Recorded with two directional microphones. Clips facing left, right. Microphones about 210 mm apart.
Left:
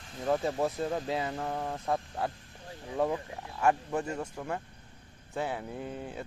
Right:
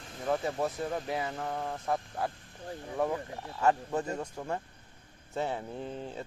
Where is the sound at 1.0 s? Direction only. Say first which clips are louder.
Left 1 dB; 25° left (ahead or behind).